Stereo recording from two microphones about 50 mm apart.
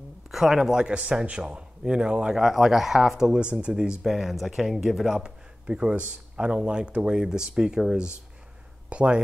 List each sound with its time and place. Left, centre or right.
0.3 s a man's voice: centre
4.0 s speech: centre
5.2 s speech: centre